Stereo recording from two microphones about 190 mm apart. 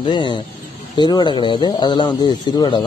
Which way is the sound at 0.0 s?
25° left (ahead or behind).